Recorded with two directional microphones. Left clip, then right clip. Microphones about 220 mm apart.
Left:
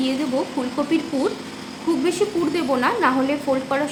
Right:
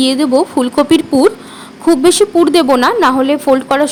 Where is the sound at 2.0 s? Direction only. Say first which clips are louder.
Right 12 dB; 50° right (ahead or behind).